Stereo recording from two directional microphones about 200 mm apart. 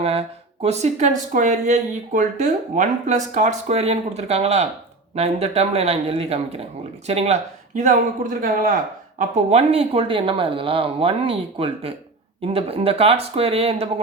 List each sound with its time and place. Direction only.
0.0 s speech: 30° right (ahead or behind)